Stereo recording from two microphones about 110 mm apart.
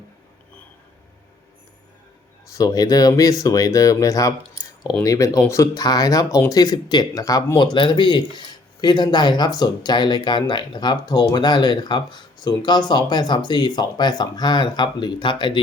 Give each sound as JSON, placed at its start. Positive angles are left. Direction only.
{"t": 2.6, "sound": "speech", "side_deg": 35}